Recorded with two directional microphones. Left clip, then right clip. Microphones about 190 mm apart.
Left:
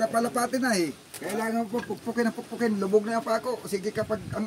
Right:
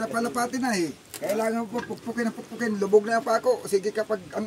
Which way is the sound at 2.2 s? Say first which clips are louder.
Left 3 dB; 25° right (ahead or behind).